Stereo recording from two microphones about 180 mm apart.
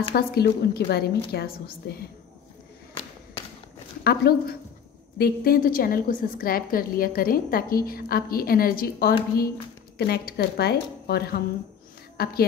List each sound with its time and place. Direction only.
0.1 s a woman's voice: 60° left (ahead or behind)
4.0 s a woman's voice: 60° left (ahead or behind)